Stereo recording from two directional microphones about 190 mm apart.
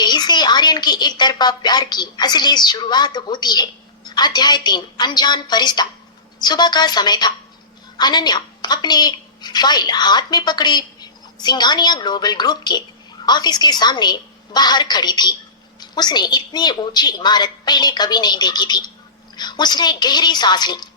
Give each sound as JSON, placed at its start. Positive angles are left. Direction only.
{"t": 0.0, "sound": "a woman's voice", "side_deg": 20}